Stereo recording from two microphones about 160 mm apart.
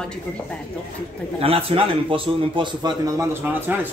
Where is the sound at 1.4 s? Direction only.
35° right (ahead or behind).